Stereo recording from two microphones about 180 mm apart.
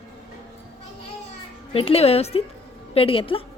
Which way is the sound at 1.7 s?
35° left (ahead or behind).